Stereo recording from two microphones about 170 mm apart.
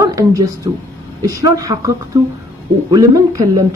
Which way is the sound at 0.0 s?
20° right (ahead or behind).